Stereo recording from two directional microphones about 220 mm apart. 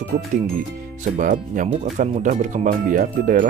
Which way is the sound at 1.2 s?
35° right (ahead or behind).